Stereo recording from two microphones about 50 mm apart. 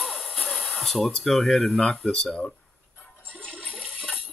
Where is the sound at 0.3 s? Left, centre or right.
Centre.